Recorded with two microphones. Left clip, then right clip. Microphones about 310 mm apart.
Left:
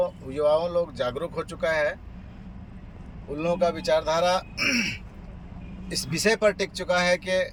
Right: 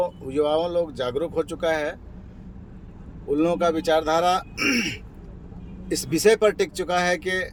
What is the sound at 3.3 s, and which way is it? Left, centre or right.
Speech, centre.